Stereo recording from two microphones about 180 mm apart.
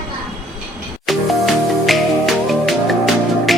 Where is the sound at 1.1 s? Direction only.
Centre (ahead or behind).